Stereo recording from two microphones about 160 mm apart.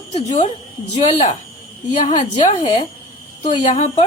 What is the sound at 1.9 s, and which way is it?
A woman's voice, 35° left (ahead or behind).